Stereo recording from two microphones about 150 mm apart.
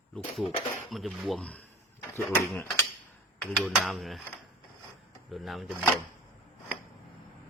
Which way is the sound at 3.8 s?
Centre (ahead or behind).